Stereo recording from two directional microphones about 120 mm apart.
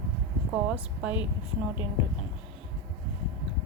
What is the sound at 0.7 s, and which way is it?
Speech, 10° right (ahead or behind).